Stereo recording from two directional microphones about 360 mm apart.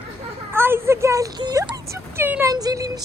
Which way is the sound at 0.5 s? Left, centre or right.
Centre.